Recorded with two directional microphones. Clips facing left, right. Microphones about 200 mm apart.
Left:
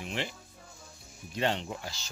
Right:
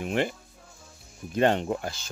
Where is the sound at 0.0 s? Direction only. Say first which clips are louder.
Right 9 dB; 50° right (ahead or behind).